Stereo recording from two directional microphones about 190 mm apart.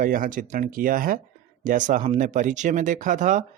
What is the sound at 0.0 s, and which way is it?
Speech, 45° right (ahead or behind).